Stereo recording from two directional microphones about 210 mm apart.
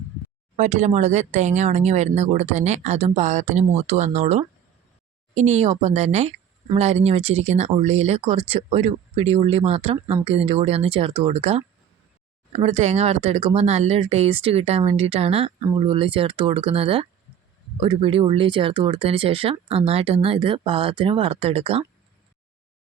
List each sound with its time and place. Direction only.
0.5 s speech: 35° right (ahead or behind)